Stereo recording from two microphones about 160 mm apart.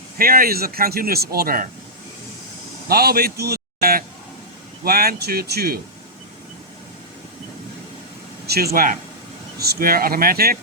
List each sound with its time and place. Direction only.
0.2 s speech: 65° right (ahead or behind)
2.9 s a man's voice: 75° right (ahead or behind)
8.4 s speech: 75° right (ahead or behind)
9.6 s speech: 75° right (ahead or behind)